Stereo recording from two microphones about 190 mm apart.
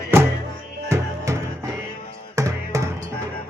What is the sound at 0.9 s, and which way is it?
Music, 15° right (ahead or behind).